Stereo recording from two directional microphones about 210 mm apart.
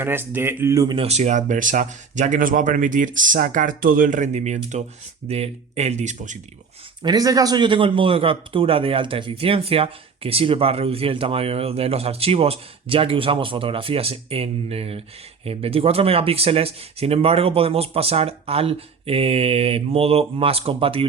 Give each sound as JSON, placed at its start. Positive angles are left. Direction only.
{"t": 0.0, "sound": "speech", "side_deg": -10}
{"t": 1.0, "sound": "speech", "side_deg": -30}
{"t": 7.0, "sound": "a man's voice", "side_deg": -20}